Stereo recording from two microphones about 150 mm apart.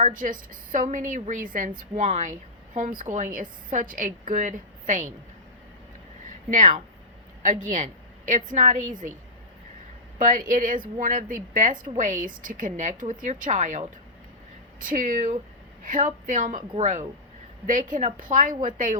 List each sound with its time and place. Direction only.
0.0 s a woman's voice: 65° right (ahead or behind)
6.5 s a woman's voice: 60° right (ahead or behind)
10.2 s a woman's voice: 60° right (ahead or behind)
16.7 s a woman's voice: 50° right (ahead or behind)
17.7 s a woman's voice: 60° right (ahead or behind)